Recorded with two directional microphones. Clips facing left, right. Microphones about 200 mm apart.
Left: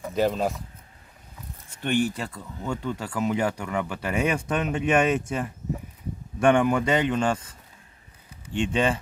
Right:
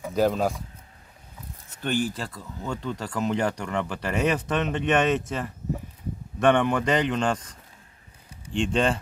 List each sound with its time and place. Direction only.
0.0 s speech: centre (ahead or behind)
1.9 s speech: 40° right (ahead or behind)
2.1 s speech: 5° left (ahead or behind)
8.5 s speech: 5° left (ahead or behind)